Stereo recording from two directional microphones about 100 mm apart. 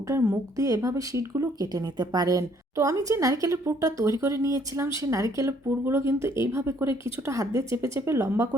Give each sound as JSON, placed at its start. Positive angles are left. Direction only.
{"t": 0.1, "sound": "speech", "side_deg": -30}